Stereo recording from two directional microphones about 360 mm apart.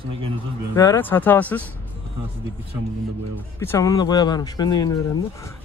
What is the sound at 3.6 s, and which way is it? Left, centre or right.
Speech, centre.